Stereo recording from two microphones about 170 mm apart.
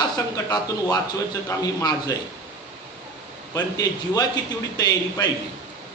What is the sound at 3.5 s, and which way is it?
A man's voice, 25° left (ahead or behind).